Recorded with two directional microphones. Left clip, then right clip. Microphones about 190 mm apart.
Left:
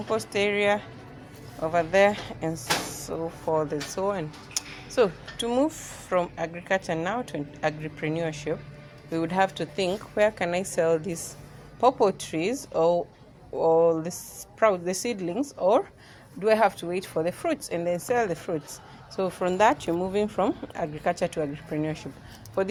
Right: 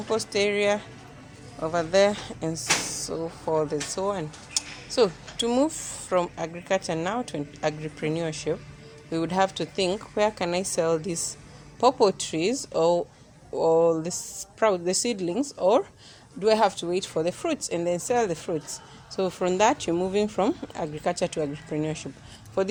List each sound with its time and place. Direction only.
0.1 s a woman's voice: 30° right (ahead or behind)
1.5 s speech: 15° right (ahead or behind)
2.9 s speech: 30° right (ahead or behind)
3.2 s a woman's voice: 15° right (ahead or behind)
17.8 s speech: 35° right (ahead or behind)
21.2 s a woman's voice: 35° right (ahead or behind)